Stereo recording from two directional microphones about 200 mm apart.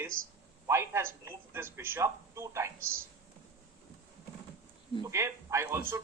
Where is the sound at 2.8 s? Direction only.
45° right (ahead or behind).